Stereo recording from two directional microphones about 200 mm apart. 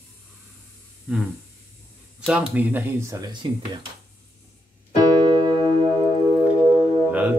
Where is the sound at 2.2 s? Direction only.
5° right (ahead or behind).